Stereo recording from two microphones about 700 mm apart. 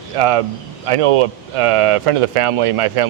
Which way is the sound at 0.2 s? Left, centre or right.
Right.